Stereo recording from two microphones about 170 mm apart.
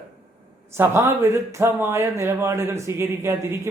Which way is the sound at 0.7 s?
15° right (ahead or behind).